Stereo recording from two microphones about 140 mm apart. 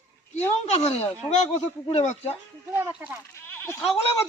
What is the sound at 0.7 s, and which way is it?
Speech, 50° left (ahead or behind).